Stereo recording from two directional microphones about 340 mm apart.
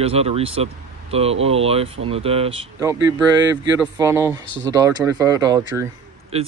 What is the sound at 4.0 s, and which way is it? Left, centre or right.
Speech, centre.